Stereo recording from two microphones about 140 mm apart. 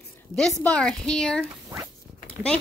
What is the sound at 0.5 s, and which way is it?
Speech, 10° left (ahead or behind).